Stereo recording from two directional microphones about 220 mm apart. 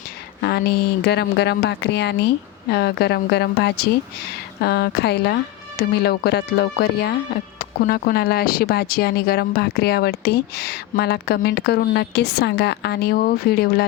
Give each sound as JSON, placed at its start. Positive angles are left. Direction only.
{"t": 0.4, "sound": "speech", "side_deg": 45}